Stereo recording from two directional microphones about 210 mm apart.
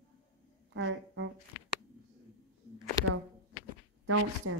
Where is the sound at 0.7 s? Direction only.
60° right (ahead or behind).